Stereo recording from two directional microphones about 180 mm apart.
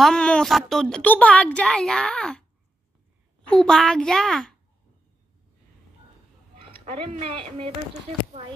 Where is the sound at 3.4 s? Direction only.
5° left (ahead or behind).